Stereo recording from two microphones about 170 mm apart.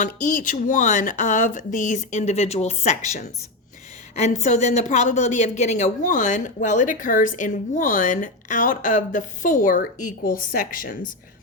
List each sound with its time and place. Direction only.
0.0 s a woman's voice: 50° left (ahead or behind)